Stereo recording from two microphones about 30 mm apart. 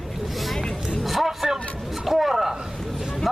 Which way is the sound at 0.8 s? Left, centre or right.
Centre.